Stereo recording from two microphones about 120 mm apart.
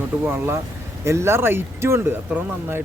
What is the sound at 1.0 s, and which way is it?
Speech, 20° right (ahead or behind).